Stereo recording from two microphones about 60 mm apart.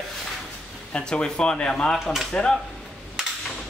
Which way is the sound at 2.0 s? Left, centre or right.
Centre.